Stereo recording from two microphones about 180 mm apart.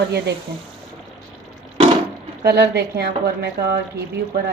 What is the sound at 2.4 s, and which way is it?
A woman's voice, 60° right (ahead or behind).